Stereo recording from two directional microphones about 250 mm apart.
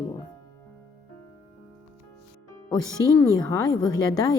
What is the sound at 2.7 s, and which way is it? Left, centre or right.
A woman's voice, centre.